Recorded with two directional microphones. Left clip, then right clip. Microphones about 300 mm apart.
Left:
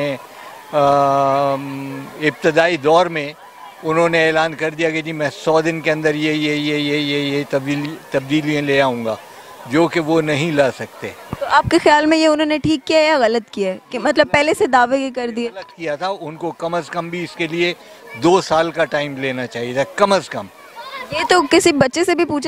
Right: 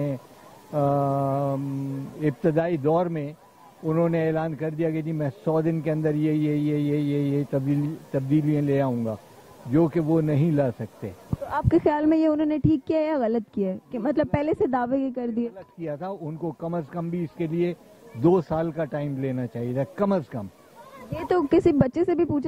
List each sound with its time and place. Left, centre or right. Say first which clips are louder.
0.7 s a man's voice: left 11 dB; centre
16.1 s speech: left 9 dB; left
16.7 s a man's voice: left 9 dB; centre